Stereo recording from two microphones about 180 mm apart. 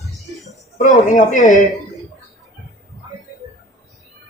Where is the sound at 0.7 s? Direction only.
45° left (ahead or behind).